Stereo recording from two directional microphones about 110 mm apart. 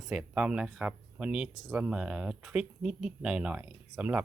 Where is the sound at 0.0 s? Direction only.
5° right (ahead or behind).